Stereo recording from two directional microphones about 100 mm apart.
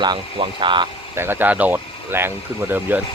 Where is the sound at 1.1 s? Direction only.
20° right (ahead or behind).